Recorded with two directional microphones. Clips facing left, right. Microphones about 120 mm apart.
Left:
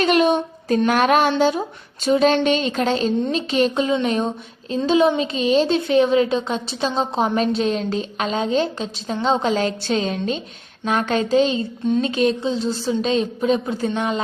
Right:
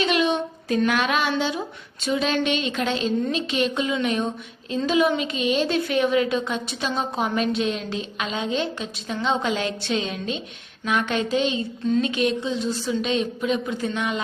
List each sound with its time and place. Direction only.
0.0 s a woman's voice: 45° left (ahead or behind)
0.9 s a sound: 45° left (ahead or behind)
1.4 s a woman's voice: 45° left (ahead or behind)